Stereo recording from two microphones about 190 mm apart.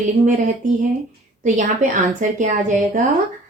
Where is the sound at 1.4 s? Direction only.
40° right (ahead or behind).